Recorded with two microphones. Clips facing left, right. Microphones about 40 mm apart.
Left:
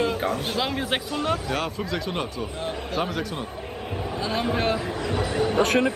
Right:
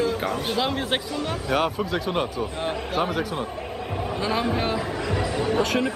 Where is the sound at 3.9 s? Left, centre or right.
Right.